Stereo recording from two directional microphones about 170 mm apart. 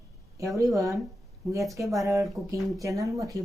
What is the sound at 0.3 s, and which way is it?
A woman's voice, 20° right (ahead or behind).